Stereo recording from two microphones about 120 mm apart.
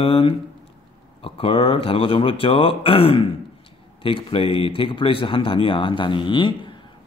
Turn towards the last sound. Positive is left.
turn(degrees=45)  # may be behind; listen again after turning